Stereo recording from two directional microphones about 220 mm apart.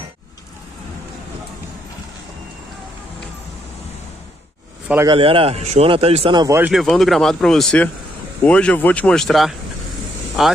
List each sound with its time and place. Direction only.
4.8 s speech: 10° right (ahead or behind)
5.1 s speech: 25° right (ahead or behind)
6.7 s speech: centre (ahead or behind)